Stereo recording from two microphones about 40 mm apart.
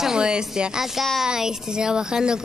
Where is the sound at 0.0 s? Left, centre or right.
Centre.